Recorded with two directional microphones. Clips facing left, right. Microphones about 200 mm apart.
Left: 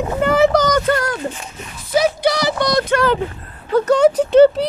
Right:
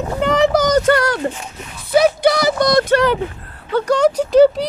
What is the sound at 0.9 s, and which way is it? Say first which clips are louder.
Speech: right 3 dB; 75° right (ahead or behind).